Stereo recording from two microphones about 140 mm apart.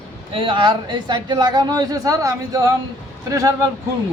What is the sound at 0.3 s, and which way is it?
Speech, 35° right (ahead or behind).